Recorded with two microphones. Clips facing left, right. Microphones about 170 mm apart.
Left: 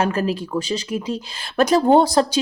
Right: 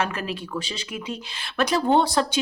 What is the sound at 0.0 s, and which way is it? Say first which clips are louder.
Speech: left 7 dB; 40° left (ahead or behind).